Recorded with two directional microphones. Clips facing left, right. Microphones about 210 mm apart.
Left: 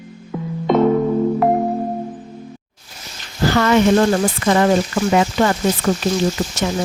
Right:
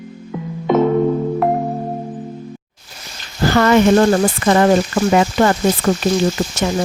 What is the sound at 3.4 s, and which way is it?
A woman's voice, 50° right (ahead or behind).